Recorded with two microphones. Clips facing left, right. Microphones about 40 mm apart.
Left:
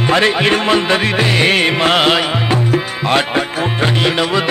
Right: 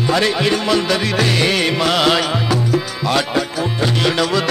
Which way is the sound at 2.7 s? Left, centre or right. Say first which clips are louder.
Left 3 dB; left.